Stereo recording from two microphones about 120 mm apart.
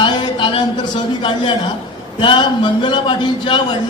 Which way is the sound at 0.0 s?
45° left (ahead or behind).